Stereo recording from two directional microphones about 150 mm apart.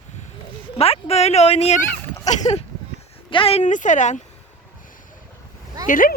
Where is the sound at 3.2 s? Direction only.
35° left (ahead or behind); by 4.2 s 55° left (ahead or behind).